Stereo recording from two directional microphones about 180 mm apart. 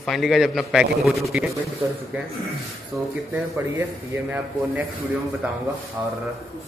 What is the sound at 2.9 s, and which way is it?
Speech, 10° right (ahead or behind).